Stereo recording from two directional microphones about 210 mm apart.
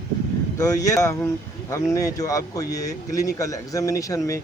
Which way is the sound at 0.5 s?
15° left (ahead or behind).